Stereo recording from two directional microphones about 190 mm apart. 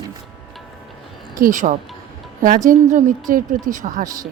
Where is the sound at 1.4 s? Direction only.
45° right (ahead or behind).